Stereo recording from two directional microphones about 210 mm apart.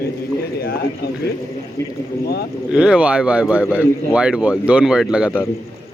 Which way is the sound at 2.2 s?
50° left (ahead or behind).